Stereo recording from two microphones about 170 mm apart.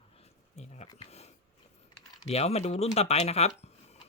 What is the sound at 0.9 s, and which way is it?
Speech, 40° left (ahead or behind).